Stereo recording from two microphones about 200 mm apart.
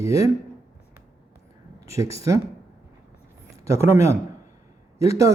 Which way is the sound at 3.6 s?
15° right (ahead or behind).